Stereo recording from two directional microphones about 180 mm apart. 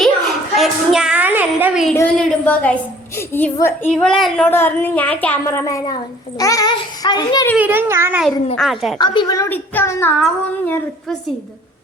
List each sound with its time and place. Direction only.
0.5 s a sound: centre (ahead or behind)
1.9 s a woman's voice: 10° left (ahead or behind)
7.5 s a child's voice: 10° right (ahead or behind)
8.5 s speech: centre (ahead or behind)
9.0 s a woman's voice: 25° left (ahead or behind); by 11.2 s 5° left (ahead or behind)